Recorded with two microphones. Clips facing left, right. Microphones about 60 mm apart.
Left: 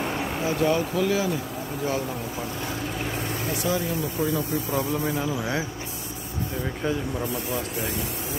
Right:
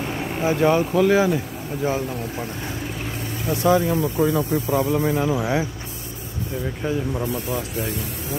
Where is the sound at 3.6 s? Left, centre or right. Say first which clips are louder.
Right 10 dB; right.